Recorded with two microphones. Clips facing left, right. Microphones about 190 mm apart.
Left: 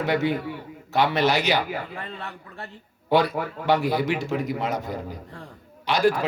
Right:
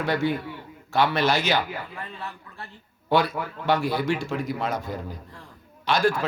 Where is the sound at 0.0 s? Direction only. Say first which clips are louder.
Left 1 dB; 20° left (ahead or behind).